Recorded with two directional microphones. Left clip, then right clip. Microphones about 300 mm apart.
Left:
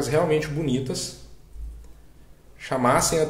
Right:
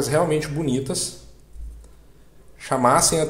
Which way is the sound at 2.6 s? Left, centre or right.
Centre.